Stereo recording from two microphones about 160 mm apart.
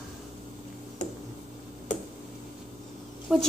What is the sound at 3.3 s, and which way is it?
Speech, centre (ahead or behind).